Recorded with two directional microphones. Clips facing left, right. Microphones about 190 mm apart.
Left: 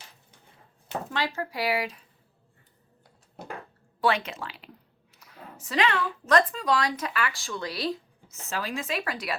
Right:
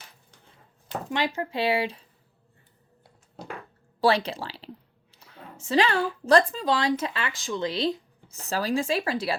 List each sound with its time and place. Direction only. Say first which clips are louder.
1.1 s speech: right 4 dB; 20° right (ahead or behind)
4.0 s speech: right 3 dB; 35° right (ahead or behind)
5.1 s a sound: right 1 dB; 30° right (ahead or behind)
6.5 s speech: right 2 dB; 25° right (ahead or behind)
8.3 s speech: right 6 dB; 35° right (ahead or behind)